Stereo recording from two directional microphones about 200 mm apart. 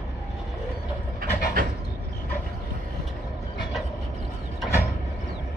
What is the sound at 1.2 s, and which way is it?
Pant, 45° right (ahead or behind).